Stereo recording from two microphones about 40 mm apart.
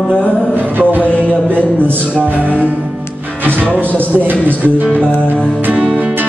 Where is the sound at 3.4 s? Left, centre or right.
Right.